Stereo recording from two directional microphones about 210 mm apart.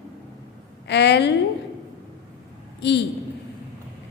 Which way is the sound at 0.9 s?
55° left (ahead or behind).